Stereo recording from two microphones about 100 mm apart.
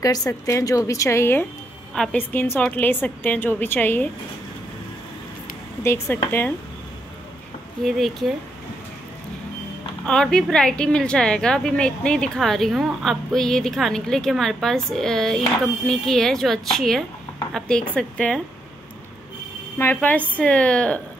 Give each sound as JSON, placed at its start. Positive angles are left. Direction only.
{"t": 0.3, "sound": "a woman's voice", "side_deg": 30}
{"t": 5.8, "sound": "a woman's voice", "side_deg": 25}
{"t": 7.8, "sound": "a woman's voice", "side_deg": 0}
{"t": 10.0, "sound": "a woman's voice", "side_deg": 10}
{"t": 19.8, "sound": "a woman's voice", "side_deg": 15}